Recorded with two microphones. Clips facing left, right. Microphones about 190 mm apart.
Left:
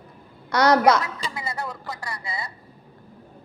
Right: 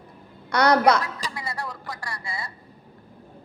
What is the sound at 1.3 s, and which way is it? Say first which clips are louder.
Speech: left 2 dB; 25° left (ahead or behind).